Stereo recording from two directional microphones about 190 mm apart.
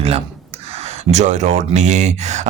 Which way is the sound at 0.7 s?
35° right (ahead or behind).